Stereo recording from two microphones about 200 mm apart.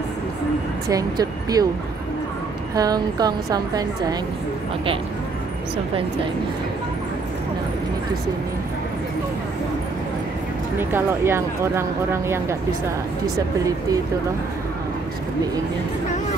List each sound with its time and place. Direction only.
0.8 s a woman's voice: 20° right (ahead or behind)
2.7 s a woman's voice: 20° right (ahead or behind)
10.8 s speech: 10° right (ahead or behind)